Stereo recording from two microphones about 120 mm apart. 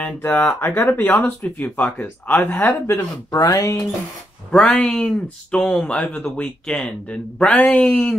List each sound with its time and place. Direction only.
0.0 s speech: 15° left (ahead or behind)
3.3 s speech: 30° left (ahead or behind)
4.5 s speech: 5° left (ahead or behind)